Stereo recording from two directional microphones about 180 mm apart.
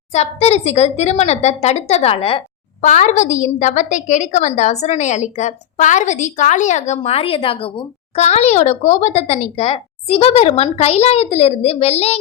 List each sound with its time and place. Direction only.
0.1 s a woman's voice: 35° left (ahead or behind)
2.8 s a woman's voice: 40° left (ahead or behind)